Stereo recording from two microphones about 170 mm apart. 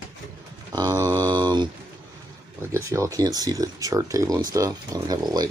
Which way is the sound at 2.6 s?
15° right (ahead or behind).